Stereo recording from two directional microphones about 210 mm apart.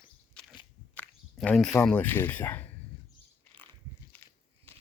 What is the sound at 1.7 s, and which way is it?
Speech, 5° left (ahead or behind).